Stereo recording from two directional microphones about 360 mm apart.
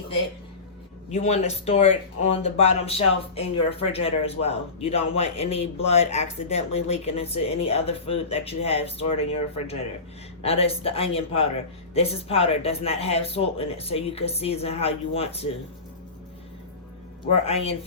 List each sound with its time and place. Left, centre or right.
1.1 s speech: centre
17.4 s speech: centre